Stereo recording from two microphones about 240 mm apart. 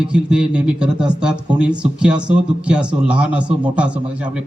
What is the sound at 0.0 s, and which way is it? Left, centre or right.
Speech, centre.